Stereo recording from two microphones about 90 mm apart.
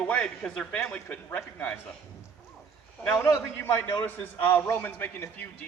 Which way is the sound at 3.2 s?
20° left (ahead or behind).